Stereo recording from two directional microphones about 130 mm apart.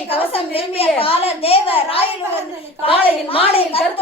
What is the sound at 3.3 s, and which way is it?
Speech, 45° left (ahead or behind).